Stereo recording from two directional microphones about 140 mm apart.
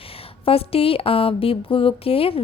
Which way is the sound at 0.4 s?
45° left (ahead or behind).